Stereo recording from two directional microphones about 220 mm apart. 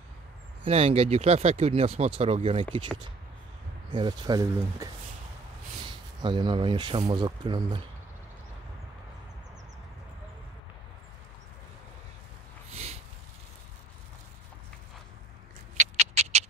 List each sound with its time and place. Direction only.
0.7 s speech: 25° right (ahead or behind)
3.9 s speech: 20° right (ahead or behind)
5.9 s speech: 20° right (ahead or behind)
12.7 s a sound: 30° right (ahead or behind)
15.8 s cat: 30° right (ahead or behind)